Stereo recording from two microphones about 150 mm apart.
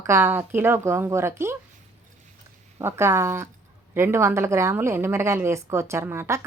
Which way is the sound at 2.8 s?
15° right (ahead or behind).